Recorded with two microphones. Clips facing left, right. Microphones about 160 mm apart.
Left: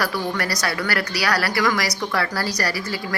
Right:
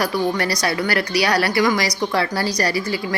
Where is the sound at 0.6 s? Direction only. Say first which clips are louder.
Right 3 dB; 20° right (ahead or behind).